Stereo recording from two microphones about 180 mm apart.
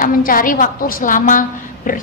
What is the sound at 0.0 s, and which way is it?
A woman's voice, 50° left (ahead or behind).